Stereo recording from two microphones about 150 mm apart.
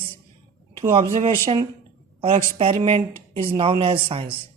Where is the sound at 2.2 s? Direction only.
35° right (ahead or behind).